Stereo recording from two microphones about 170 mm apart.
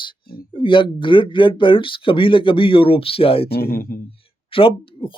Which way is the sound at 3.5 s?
60° left (ahead or behind).